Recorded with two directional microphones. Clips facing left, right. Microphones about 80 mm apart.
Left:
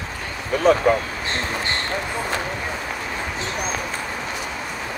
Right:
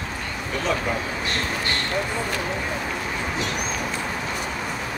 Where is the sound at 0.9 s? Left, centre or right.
Left.